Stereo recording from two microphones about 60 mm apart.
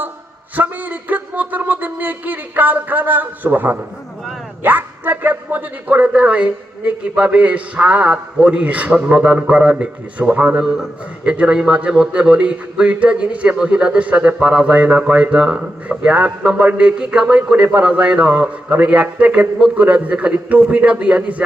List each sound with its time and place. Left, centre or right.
0.5 s a man's voice: right